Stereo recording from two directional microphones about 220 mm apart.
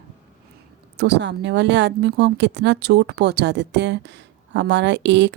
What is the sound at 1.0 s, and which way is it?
A woman's voice, 50° right (ahead or behind).